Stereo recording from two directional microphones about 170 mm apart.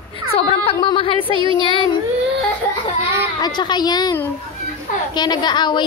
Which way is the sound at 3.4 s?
25° left (ahead or behind).